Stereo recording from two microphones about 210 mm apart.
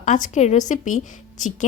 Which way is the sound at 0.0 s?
35° left (ahead or behind).